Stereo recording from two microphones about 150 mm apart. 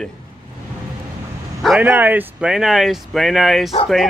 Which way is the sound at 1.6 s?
10° right (ahead or behind).